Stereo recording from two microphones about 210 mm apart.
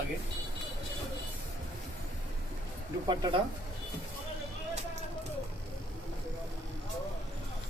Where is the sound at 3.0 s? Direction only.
20° right (ahead or behind).